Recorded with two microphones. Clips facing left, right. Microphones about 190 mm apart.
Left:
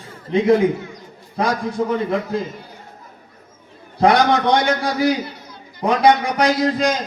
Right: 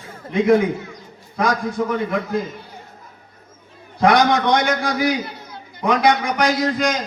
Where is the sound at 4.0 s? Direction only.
30° left (ahead or behind).